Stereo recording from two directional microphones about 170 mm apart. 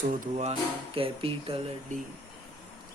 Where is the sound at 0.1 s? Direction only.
40° right (ahead or behind).